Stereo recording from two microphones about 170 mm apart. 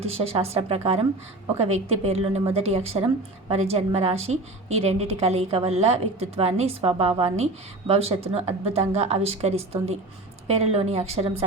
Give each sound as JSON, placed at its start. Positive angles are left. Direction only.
{"t": 0.0, "sound": "a woman's voice", "side_deg": -35}